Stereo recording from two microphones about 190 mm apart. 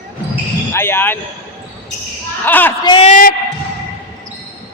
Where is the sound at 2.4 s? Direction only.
10° left (ahead or behind).